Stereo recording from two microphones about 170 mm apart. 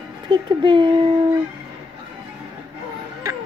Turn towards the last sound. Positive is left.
turn(degrees=-20)  # may be behind; listen again after turning